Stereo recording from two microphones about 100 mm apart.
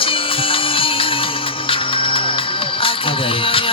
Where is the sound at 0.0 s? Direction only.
65° left (ahead or behind).